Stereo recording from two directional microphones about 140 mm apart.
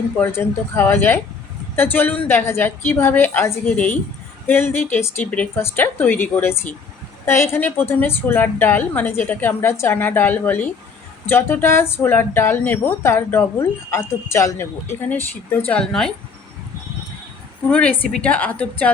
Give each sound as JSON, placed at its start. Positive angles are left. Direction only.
{"t": 0.2, "sound": "speech", "side_deg": 15}
{"t": 15.6, "sound": "speech", "side_deg": 5}
{"t": 17.7, "sound": "speech", "side_deg": 5}